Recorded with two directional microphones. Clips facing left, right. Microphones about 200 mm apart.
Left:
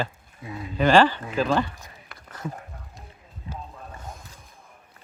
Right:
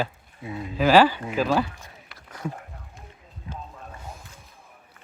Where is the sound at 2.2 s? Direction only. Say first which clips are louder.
Right 1 dB; 10° right (ahead or behind).